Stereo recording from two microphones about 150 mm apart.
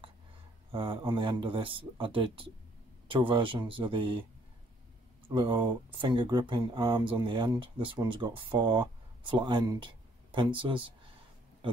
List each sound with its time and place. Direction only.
0.7 s speech: 35° right (ahead or behind)
5.3 s speech: 30° right (ahead or behind)